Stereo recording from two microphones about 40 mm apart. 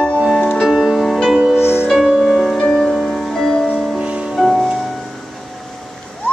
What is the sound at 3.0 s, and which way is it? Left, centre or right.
Music, centre.